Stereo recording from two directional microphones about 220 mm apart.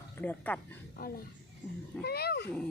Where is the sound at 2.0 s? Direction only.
45° left (ahead or behind).